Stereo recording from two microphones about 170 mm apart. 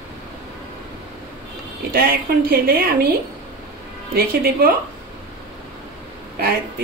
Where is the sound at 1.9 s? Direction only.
60° right (ahead or behind).